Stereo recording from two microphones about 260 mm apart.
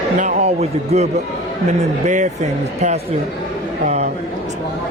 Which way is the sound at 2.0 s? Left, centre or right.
Right.